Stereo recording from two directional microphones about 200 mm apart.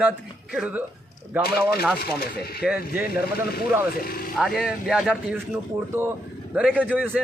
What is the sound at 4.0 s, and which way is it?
Speech, 50° left (ahead or behind).